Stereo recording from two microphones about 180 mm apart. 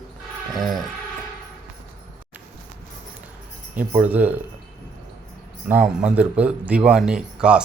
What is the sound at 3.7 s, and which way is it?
Speech, 10° right (ahead or behind).